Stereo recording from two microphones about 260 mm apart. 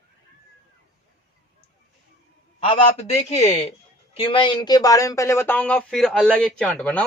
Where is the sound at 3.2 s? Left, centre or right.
Left; by 7.0 s centre.